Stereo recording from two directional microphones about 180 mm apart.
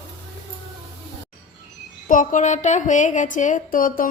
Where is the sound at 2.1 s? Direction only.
45° left (ahead or behind).